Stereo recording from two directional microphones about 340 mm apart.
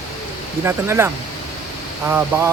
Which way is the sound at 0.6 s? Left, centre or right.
Centre.